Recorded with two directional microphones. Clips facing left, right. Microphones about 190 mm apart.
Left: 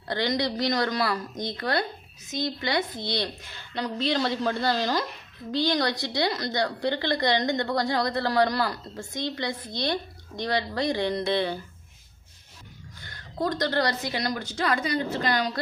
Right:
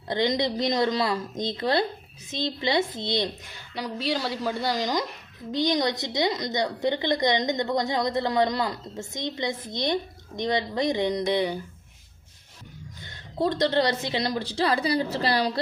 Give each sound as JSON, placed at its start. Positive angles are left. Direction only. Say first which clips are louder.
{"t": 0.1, "sound": "a woman's voice", "louder": "right 2 dB", "side_deg": -20}
{"t": 13.0, "sound": "a woman's voice", "louder": "right 3 dB", "side_deg": -20}